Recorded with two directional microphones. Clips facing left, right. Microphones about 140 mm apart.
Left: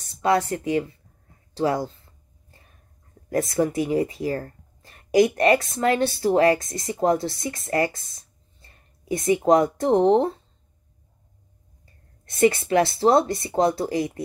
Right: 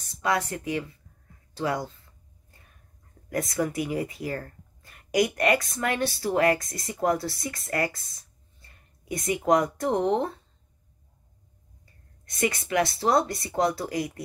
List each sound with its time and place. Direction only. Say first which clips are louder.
0.2 s speech: left 6 dB; 30° left (ahead or behind)
3.3 s speech: left 5 dB; 25° left (ahead or behind)
12.3 s speech: left 8 dB; 30° left (ahead or behind)